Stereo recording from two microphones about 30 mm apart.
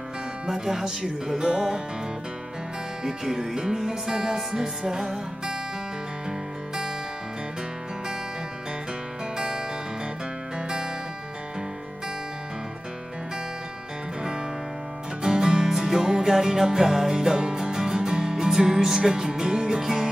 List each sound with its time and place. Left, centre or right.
0.5 s music: centre
3.0 s music: centre
9.4 s music: right
15.2 s music: right